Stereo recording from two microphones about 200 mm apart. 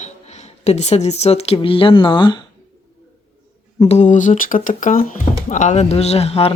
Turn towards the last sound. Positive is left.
turn(degrees=30)  # may be behind; listen again after turning